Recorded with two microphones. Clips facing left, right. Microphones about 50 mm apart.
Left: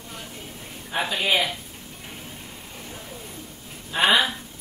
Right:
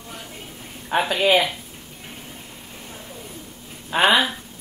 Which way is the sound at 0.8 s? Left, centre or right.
Right.